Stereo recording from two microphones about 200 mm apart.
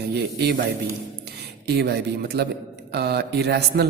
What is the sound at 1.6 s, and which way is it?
Speech, 55° right (ahead or behind).